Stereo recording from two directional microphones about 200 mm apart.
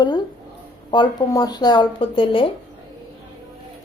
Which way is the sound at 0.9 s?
20° left (ahead or behind).